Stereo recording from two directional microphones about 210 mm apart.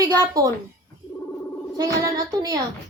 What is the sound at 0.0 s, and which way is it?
Speech, 15° right (ahead or behind).